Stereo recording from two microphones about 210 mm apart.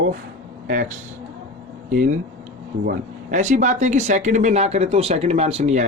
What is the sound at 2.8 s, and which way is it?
Speech, 45° right (ahead or behind).